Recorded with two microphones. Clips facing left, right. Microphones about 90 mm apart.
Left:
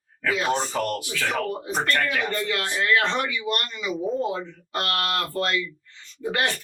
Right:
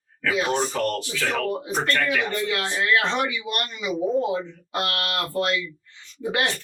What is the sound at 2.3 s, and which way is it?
Speech, 20° right (ahead or behind).